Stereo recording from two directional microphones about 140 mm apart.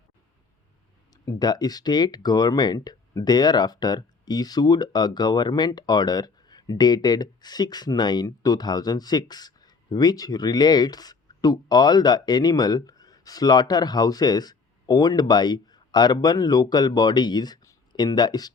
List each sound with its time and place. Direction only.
1.1 s speech: 25° left (ahead or behind)